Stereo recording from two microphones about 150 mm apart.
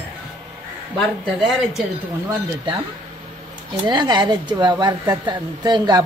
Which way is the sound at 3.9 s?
30° right (ahead or behind).